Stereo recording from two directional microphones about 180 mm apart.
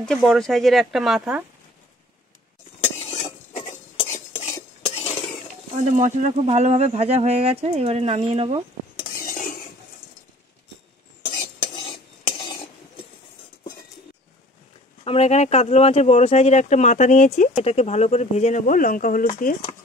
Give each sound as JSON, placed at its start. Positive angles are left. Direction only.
{"t": 0.0, "sound": "speech", "side_deg": 0}
{"t": 3.0, "sound": "stir", "side_deg": 35}
{"t": 4.3, "sound": "cutlery", "side_deg": 40}
{"t": 5.8, "sound": "speech", "side_deg": -40}
{"t": 9.2, "sound": "cutlery", "side_deg": 50}
{"t": 11.7, "sound": "cutlery", "side_deg": 25}
{"t": 15.0, "sound": "speech", "side_deg": 35}